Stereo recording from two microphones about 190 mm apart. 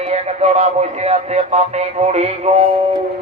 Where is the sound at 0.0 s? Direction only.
35° right (ahead or behind).